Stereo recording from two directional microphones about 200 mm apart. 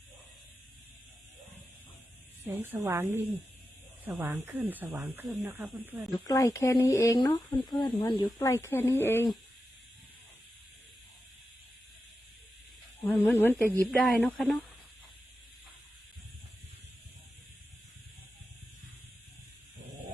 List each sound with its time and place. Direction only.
2.4 s speech: 10° right (ahead or behind)
6.1 s speech: 15° left (ahead or behind)
13.1 s speech: 5° left (ahead or behind)